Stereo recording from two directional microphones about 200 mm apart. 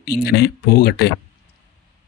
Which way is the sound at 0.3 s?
50° left (ahead or behind).